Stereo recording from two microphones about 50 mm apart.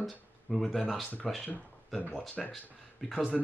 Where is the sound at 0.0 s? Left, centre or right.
Centre.